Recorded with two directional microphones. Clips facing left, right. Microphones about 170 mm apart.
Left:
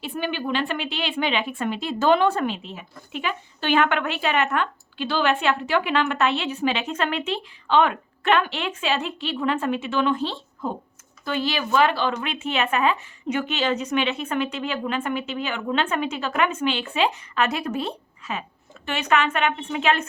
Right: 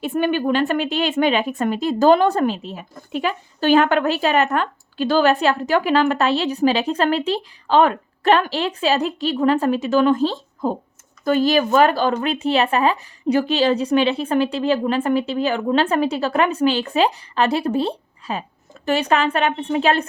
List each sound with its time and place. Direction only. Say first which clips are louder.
0.0 s speech: right 8 dB; 50° right (ahead or behind)